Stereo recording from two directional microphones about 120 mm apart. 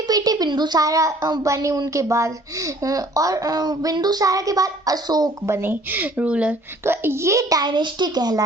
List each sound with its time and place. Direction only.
0.1 s speech: 35° right (ahead or behind)
5.5 s a woman's voice: 20° right (ahead or behind)
7.6 s a child's voice: 40° right (ahead or behind)